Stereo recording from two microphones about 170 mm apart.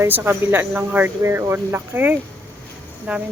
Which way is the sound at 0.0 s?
10° right (ahead or behind).